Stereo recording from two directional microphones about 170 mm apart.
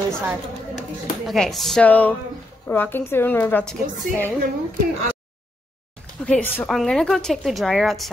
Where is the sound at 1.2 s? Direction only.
Centre (ahead or behind).